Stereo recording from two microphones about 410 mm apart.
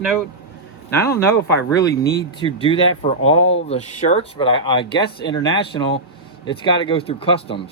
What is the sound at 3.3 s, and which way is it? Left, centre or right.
Speech, left.